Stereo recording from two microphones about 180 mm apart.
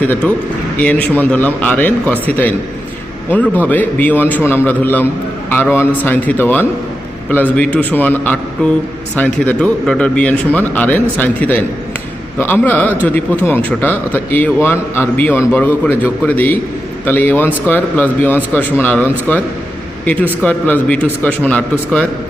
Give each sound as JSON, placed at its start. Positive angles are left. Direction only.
{"t": 0.0, "sound": "a man's voice", "side_deg": 10}
{"t": 3.2, "sound": "a man's voice", "side_deg": 10}
{"t": 20.4, "sound": "a man's voice", "side_deg": 10}